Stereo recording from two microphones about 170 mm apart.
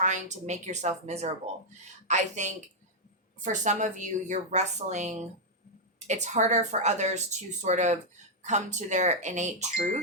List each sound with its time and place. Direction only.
0.0 s speech: 45° right (ahead or behind)